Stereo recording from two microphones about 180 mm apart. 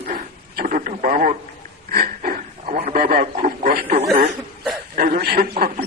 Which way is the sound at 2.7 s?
50° right (ahead or behind).